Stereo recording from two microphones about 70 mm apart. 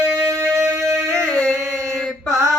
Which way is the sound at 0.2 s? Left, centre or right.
Right.